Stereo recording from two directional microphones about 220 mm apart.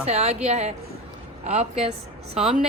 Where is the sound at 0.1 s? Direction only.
30° right (ahead or behind).